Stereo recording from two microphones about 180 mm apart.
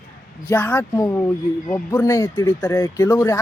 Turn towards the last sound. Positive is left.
turn(degrees=20)  # may be behind; listen again after turning